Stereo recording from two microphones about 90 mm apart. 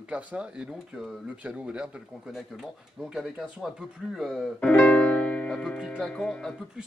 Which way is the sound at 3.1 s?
5° right (ahead or behind).